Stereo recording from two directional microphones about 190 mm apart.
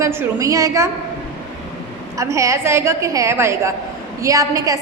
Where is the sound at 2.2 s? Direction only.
15° right (ahead or behind).